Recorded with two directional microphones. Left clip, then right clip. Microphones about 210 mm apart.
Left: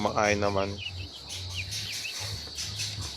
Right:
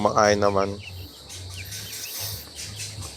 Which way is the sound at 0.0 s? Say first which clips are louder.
Right 7 dB; 15° right (ahead or behind).